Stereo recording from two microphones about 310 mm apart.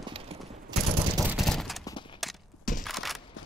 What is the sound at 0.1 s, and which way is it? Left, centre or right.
Clip-clop, centre.